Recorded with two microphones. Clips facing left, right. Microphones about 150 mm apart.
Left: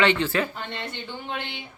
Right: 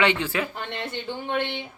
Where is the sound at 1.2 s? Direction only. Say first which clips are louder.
Right 7 dB; 55° right (ahead or behind).